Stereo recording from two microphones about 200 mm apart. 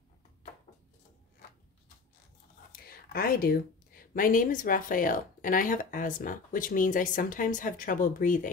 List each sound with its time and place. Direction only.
2.7 s speech: 50° left (ahead or behind)